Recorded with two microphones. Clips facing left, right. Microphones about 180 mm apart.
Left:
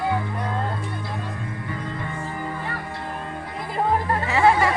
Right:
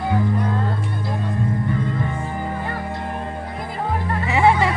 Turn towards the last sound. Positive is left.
turn(degrees=-20)  # may be behind; listen again after turning